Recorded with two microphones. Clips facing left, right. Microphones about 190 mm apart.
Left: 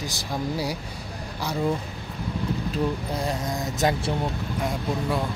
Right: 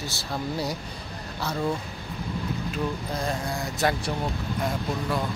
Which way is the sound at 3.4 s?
20° left (ahead or behind).